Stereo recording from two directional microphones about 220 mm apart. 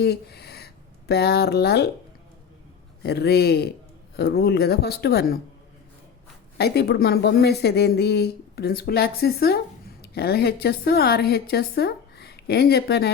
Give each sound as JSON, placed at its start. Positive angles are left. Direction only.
{"t": 0.0, "sound": "speech", "side_deg": 45}
{"t": 3.0, "sound": "speech", "side_deg": 45}
{"t": 6.6, "sound": "a woman's voice", "side_deg": 45}